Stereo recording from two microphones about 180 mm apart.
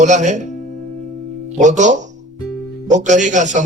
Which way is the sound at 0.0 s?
40° right (ahead or behind).